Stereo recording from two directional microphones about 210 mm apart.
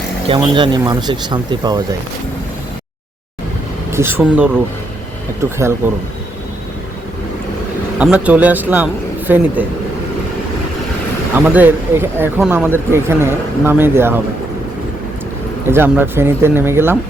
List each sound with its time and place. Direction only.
0.3 s speech: 25° right (ahead or behind)
3.9 s speech: 10° right (ahead or behind)
7.9 s speech: 5° right (ahead or behind)
11.3 s speech: 10° right (ahead or behind)
15.6 s speech: 10° right (ahead or behind)